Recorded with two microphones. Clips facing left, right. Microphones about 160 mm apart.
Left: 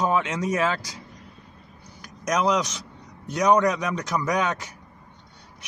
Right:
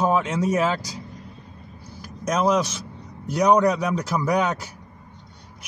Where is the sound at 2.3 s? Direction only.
5° right (ahead or behind).